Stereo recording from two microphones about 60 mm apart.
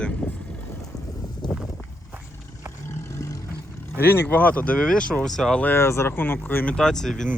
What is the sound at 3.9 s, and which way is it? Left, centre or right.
Speech, left.